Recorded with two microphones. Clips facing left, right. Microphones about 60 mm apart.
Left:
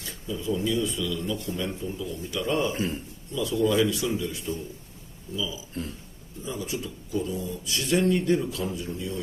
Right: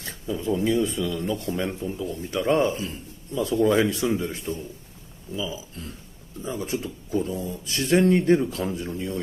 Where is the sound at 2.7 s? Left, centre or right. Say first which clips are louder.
Left 3 dB; left.